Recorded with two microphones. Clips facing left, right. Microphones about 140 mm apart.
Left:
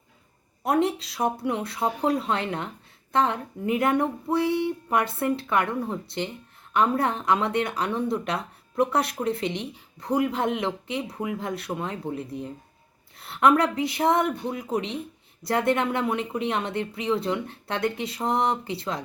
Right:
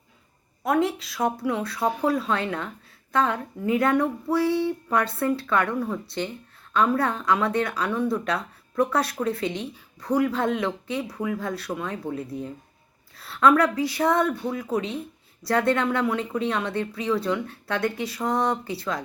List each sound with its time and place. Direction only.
0.7 s speech: 30° left (ahead or behind)